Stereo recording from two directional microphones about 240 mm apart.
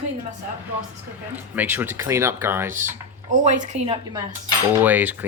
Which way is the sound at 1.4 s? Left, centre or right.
Centre.